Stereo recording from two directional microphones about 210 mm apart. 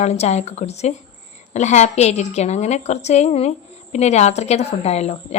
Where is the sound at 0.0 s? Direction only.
30° left (ahead or behind).